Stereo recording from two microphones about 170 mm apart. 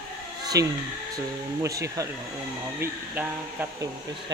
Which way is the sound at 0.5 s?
20° right (ahead or behind).